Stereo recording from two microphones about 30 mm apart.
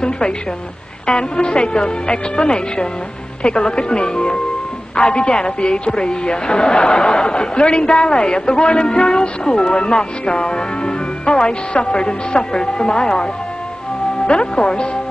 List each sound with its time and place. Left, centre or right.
1.1 s a woman's voice: left